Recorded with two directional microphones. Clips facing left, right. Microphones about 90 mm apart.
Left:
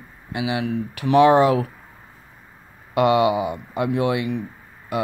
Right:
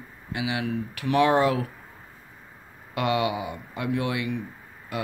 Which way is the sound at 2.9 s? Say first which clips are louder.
Left 8 dB; 25° left (ahead or behind).